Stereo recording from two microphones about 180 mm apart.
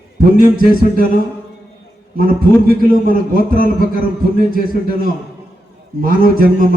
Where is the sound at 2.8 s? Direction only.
55° left (ahead or behind).